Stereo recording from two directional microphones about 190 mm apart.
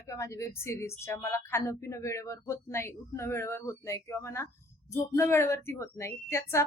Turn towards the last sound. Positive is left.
turn(degrees=15)  # may be behind; listen again after turning